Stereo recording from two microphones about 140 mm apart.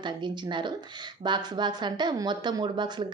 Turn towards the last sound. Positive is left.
turn(degrees=-30)  # may be behind; listen again after turning